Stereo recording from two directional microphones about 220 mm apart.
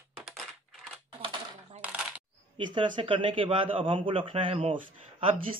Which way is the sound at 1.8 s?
5° right (ahead or behind).